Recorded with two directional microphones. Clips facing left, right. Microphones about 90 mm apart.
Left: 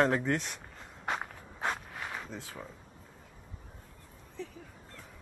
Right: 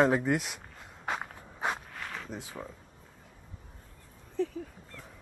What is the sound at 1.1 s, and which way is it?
Walk, 5° right (ahead or behind).